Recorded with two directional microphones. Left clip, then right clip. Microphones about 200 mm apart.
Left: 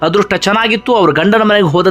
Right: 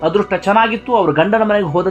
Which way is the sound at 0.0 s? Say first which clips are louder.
Left 3 dB; 25° left (ahead or behind).